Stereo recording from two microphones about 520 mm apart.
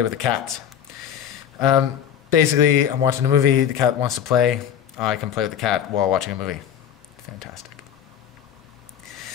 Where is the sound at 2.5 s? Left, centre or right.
Centre.